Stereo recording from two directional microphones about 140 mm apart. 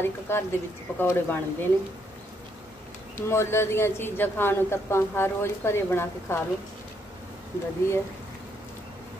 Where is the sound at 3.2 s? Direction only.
20° left (ahead or behind).